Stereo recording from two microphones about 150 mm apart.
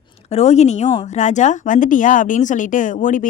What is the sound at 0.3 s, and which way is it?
Speech, 50° left (ahead or behind).